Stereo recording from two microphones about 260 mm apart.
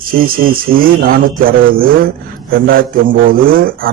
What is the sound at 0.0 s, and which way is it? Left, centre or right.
A man's voice, right.